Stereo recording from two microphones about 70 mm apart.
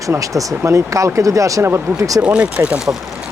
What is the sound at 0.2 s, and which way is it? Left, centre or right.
Speech, right.